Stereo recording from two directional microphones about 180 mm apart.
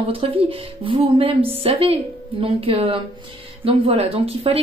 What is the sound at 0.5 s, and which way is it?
A woman's voice, 30° right (ahead or behind).